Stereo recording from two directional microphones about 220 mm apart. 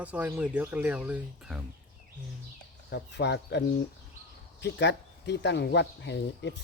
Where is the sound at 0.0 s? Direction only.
5° right (ahead or behind).